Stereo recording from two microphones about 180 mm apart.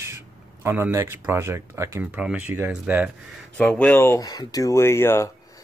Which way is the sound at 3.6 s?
5° left (ahead or behind).